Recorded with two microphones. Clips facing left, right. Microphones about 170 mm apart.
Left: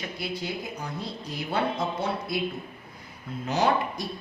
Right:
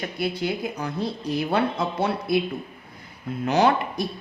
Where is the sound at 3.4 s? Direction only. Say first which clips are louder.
Right 4 dB; 70° right (ahead or behind).